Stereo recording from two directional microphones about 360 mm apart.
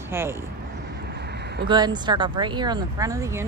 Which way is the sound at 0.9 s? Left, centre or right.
Right.